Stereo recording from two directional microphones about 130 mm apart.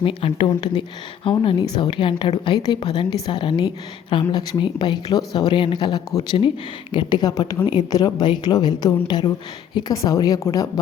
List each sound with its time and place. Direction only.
0.0 s a woman's voice: 45° left (ahead or behind); by 10.7 s 25° left (ahead or behind)